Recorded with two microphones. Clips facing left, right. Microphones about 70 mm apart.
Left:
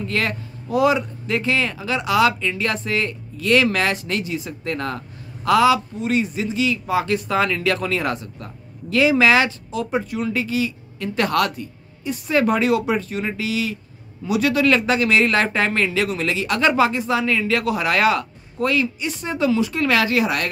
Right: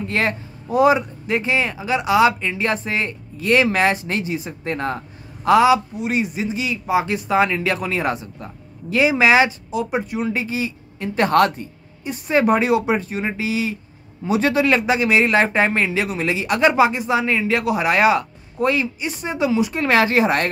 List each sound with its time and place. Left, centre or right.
0.0 s speech: right